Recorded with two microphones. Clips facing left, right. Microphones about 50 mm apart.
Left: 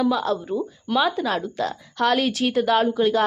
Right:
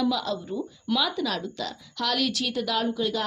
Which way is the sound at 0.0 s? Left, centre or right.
Left.